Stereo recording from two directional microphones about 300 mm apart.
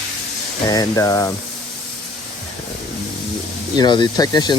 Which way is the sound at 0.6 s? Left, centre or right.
Centre.